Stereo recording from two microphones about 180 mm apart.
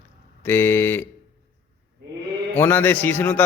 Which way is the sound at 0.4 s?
10° left (ahead or behind).